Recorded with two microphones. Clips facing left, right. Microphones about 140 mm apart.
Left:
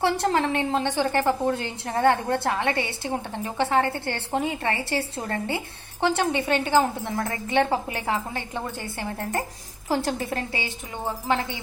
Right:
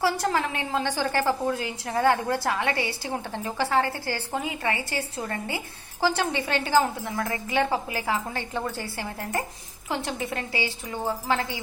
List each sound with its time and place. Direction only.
0.0 s a woman's voice: 30° left (ahead or behind)
9.9 s speech: 35° left (ahead or behind)